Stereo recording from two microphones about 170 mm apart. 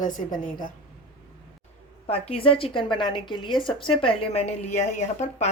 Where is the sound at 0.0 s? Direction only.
50° left (ahead or behind).